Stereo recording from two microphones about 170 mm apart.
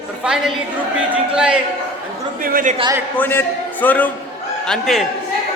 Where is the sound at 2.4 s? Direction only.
55° right (ahead or behind).